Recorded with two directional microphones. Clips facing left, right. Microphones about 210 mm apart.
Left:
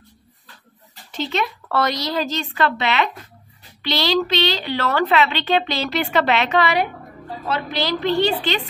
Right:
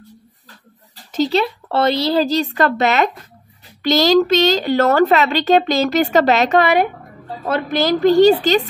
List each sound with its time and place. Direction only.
1.1 s a woman's voice: 35° right (ahead or behind)